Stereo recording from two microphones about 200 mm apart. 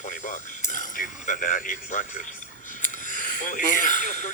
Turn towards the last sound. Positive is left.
turn(degrees=35)  # may be behind; listen again after turning